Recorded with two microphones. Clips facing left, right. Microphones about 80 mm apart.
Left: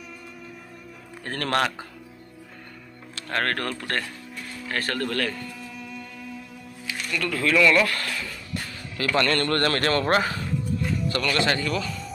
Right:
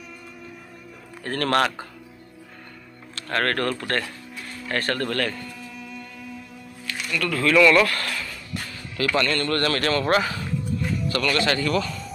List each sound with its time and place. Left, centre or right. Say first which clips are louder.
1.2 s speech: right 3 dB; centre
3.2 s speech: right 3 dB; centre
4.6 s music: right 2 dB; centre
7.1 s speech: right 2 dB; left
7.5 s speech: right 3 dB; centre
7.8 s a sound: right 2 dB; centre
9.1 s a man's voice: left 2 dB; left
10.0 s speech: right 1 dB; left
11.3 s speech: even; left
11.6 s speech: right 4 dB; centre